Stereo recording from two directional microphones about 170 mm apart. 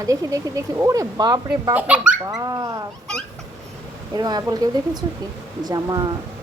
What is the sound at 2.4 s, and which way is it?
Speech, 20° right (ahead or behind).